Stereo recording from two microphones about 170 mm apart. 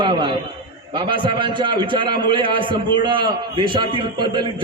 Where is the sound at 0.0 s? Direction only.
25° right (ahead or behind).